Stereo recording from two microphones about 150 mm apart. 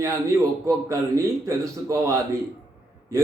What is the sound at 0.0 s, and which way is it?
A man's voice, 20° right (ahead or behind).